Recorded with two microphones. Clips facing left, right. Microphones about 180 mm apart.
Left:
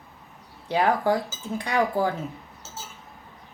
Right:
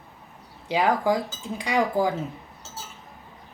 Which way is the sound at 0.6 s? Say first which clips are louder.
Even; 10° right (ahead or behind).